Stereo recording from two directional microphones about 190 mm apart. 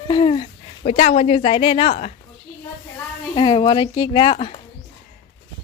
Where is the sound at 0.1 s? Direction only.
25° left (ahead or behind).